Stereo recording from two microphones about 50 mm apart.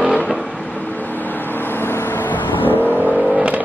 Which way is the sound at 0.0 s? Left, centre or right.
Right.